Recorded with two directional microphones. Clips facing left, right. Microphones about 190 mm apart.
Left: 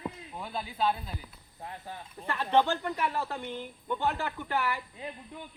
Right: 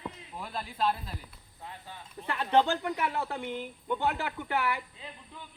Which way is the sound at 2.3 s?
10° right (ahead or behind).